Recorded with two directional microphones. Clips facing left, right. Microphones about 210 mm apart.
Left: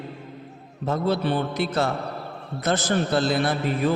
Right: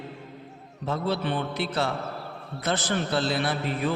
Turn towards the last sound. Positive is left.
turn(degrees=45)  # may be behind; listen again after turning